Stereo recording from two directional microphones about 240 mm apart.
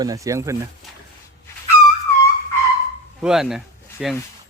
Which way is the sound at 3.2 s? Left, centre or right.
Centre.